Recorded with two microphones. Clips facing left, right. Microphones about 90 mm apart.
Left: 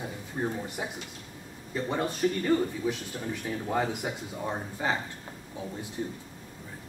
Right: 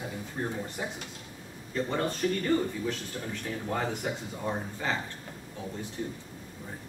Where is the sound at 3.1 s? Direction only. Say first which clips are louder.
Left 1 dB; centre (ahead or behind).